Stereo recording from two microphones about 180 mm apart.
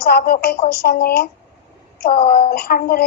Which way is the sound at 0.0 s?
60° left (ahead or behind).